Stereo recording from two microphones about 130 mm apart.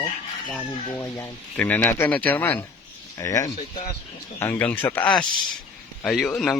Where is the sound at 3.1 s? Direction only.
25° left (ahead or behind).